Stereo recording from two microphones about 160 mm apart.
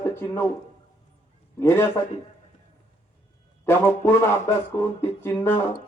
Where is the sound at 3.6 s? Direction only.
15° left (ahead or behind).